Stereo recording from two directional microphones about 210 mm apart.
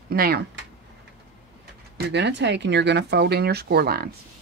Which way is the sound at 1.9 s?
55° right (ahead or behind).